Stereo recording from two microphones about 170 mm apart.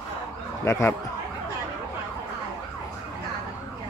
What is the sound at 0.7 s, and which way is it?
Speech, 15° left (ahead or behind).